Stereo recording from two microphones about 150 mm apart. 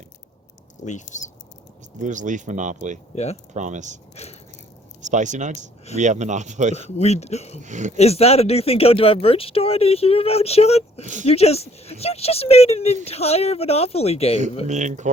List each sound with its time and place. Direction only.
0.9 s speech: 55° left (ahead or behind)
2.0 s speech: 55° right (ahead or behind)
4.1 s speech: 45° left (ahead or behind)
5.0 s speech: 55° right (ahead or behind)
6.9 s speech: 45° left (ahead or behind)
7.6 s speech: 55° right (ahead or behind)
7.9 s speech: 45° left (ahead or behind)
11.0 s speech: 55° right (ahead or behind)
11.3 s speech: 45° left (ahead or behind)
14.7 s speech: 55° right (ahead or behind)